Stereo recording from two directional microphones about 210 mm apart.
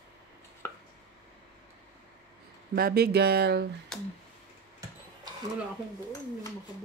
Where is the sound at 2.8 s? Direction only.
45° right (ahead or behind).